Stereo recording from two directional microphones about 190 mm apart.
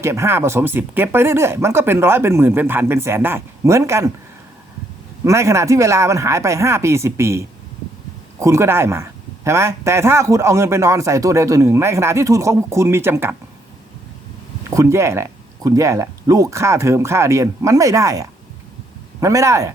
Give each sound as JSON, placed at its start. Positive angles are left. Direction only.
{"t": 0.0, "sound": "a man's voice", "side_deg": -15}
{"t": 5.2, "sound": "a man's voice", "side_deg": -15}
{"t": 14.7, "sound": "a man's voice", "side_deg": -15}